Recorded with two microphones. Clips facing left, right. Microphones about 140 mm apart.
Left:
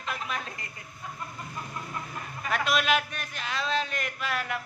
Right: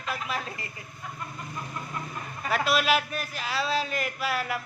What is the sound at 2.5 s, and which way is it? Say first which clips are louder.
A man's voice: right 2 dB; 5° right (ahead or behind).